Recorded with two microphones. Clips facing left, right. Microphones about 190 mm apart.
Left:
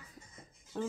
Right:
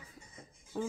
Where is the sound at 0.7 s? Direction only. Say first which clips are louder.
Even; 5° right (ahead or behind).